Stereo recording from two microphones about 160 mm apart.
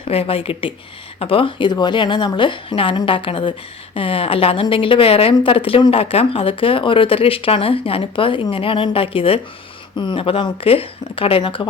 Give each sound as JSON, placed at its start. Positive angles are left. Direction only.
{"t": 0.0, "sound": "a woman's voice", "side_deg": 35}